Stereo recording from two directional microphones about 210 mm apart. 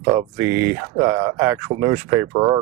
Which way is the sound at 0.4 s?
75° right (ahead or behind).